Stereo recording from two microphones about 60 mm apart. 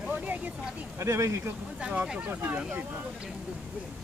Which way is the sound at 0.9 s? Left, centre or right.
Right.